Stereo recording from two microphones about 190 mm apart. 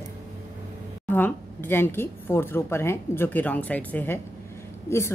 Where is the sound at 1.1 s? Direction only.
10° left (ahead or behind).